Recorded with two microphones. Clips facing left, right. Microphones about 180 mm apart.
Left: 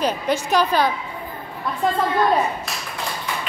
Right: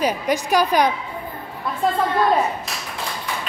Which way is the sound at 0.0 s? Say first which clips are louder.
Right 1 dB; 10° right (ahead or behind).